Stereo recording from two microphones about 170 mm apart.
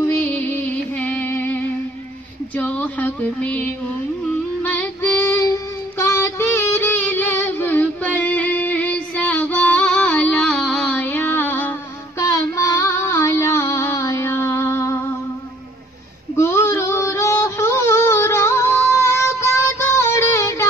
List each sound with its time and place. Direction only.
0.0 s music: 10° left (ahead or behind)
2.5 s a sound: 10° left (ahead or behind)
4.6 s music: 10° left (ahead or behind)
5.9 s female singing: 15° left (ahead or behind)
16.3 s child singing: 15° left (ahead or behind)